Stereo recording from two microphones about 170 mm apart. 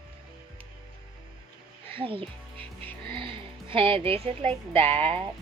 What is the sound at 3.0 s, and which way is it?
Music, 30° right (ahead or behind).